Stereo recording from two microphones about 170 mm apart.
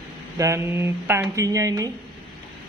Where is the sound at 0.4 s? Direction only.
15° right (ahead or behind).